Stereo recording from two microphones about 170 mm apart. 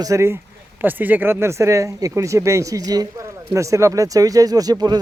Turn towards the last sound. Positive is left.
turn(degrees=-25)  # may be behind; listen again after turning